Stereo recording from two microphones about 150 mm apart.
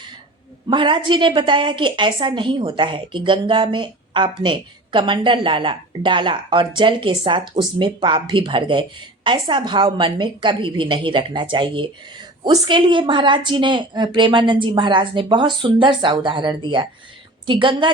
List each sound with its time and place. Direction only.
0.7 s a woman's voice: 30° right (ahead or behind)